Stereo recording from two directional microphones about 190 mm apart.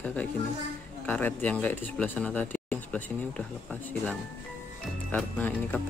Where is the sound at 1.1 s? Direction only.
10° left (ahead or behind).